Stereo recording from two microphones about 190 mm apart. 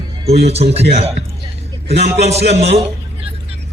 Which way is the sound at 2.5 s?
35° right (ahead or behind).